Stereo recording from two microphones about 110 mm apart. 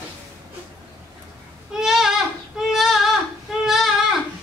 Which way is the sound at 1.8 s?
5° right (ahead or behind).